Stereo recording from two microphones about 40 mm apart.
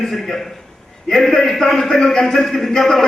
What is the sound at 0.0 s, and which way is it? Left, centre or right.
A man's voice, centre.